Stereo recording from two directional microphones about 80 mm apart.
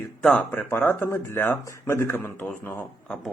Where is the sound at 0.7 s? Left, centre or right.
Left.